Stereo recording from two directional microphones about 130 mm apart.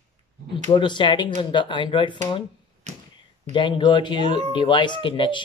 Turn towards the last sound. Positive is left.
turn(degrees=40)  # may be behind; listen again after turning